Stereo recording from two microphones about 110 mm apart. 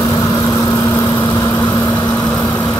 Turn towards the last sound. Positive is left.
turn(degrees=30)  # may be behind; listen again after turning